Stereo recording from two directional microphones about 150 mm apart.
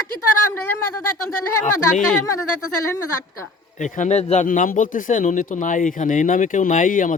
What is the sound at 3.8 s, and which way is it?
Speech, 55° left (ahead or behind).